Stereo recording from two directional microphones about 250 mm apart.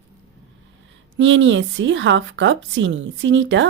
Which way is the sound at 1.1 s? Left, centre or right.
Right.